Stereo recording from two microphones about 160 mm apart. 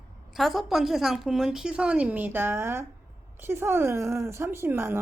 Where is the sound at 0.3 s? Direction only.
Centre (ahead or behind).